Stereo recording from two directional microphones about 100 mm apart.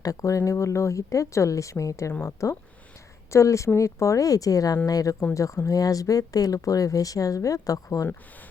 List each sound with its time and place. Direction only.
0.0 s speech: 35° left (ahead or behind)